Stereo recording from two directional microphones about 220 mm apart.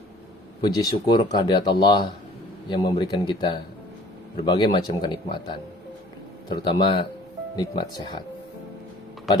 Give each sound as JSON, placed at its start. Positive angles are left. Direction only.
{"t": 0.6, "sound": "speech", "side_deg": 15}
{"t": 6.5, "sound": "speech", "side_deg": 20}